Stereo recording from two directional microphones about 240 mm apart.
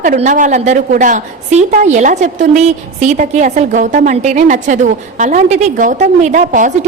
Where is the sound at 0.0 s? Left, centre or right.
Right.